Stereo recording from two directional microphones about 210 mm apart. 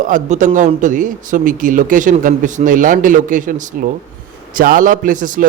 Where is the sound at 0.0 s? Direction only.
35° right (ahead or behind).